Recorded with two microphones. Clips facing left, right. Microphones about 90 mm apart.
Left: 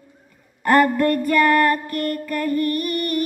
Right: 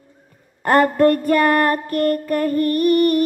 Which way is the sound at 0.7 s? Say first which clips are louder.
Right 2 dB; 40° right (ahead or behind).